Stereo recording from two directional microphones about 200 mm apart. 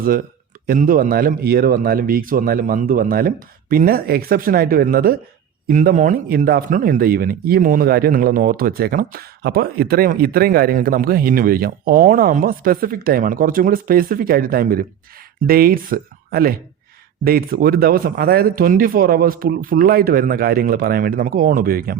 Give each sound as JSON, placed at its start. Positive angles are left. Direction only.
{"t": 0.7, "sound": "a man's voice", "side_deg": -45}